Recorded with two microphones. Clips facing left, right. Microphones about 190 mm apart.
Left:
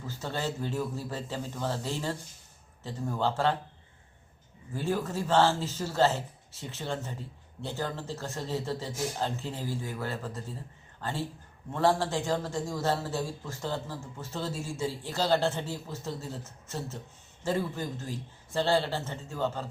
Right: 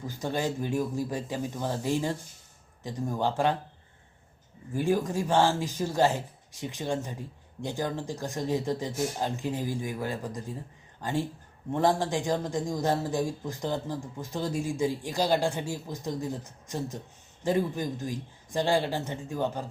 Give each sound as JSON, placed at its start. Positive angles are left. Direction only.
{"t": 0.0, "sound": "speech", "side_deg": -15}
{"t": 4.7, "sound": "speech", "side_deg": -15}